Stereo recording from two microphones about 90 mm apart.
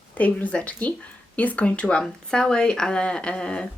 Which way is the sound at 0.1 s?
15° left (ahead or behind).